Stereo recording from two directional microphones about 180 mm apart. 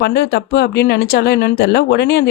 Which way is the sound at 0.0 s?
60° left (ahead or behind).